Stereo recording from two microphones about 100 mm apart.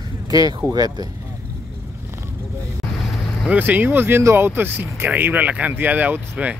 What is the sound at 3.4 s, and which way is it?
Speech, 15° right (ahead or behind).